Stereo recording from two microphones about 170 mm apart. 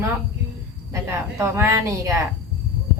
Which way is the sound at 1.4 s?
15° right (ahead or behind).